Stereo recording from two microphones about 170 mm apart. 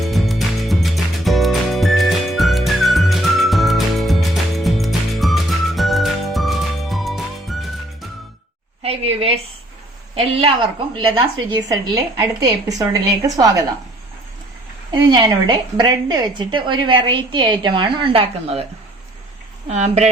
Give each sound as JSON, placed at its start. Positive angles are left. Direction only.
{"t": 0.0, "sound": "music", "side_deg": 0}
{"t": 8.8, "sound": "a sound", "side_deg": -35}
{"t": 10.2, "sound": "a woman's voice", "side_deg": -35}
{"t": 14.9, "sound": "a woman's voice", "side_deg": -25}
{"t": 19.6, "sound": "speech", "side_deg": -40}